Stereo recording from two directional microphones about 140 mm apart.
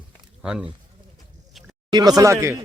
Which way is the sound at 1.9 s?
30° right (ahead or behind).